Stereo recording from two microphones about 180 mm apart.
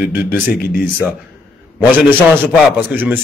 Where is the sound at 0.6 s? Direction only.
55° left (ahead or behind).